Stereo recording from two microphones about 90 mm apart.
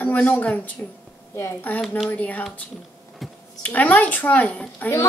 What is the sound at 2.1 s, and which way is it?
Speech, 20° left (ahead or behind).